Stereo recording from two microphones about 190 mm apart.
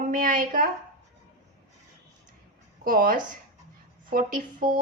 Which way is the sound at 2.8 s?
45° right (ahead or behind).